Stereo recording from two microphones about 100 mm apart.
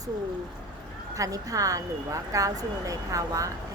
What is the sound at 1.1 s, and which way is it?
Speech, 35° right (ahead or behind).